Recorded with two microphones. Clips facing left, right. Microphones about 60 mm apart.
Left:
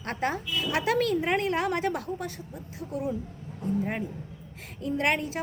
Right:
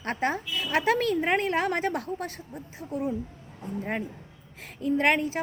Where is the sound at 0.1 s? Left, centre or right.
Right.